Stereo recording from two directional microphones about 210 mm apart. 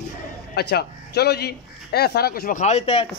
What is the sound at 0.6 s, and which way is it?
Speech, 50° left (ahead or behind).